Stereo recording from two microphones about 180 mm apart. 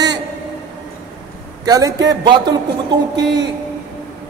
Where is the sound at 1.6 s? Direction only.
20° right (ahead or behind).